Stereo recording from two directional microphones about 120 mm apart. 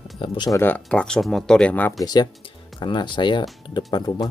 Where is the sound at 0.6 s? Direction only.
15° left (ahead or behind).